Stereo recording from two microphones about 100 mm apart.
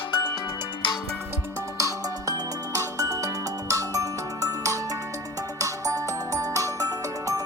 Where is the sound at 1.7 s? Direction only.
35° right (ahead or behind).